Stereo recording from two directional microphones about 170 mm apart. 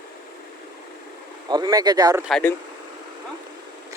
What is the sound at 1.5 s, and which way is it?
Speech, 25° right (ahead or behind).